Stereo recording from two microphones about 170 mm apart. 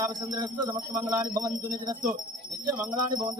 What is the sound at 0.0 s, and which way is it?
Speech, 25° right (ahead or behind).